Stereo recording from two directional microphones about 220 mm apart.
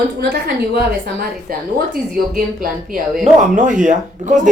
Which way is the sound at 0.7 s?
45° right (ahead or behind).